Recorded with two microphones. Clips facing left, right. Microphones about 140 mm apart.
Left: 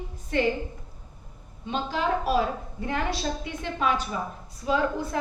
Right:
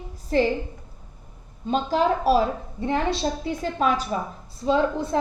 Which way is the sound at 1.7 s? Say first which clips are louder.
Right 5 dB; 40° right (ahead or behind).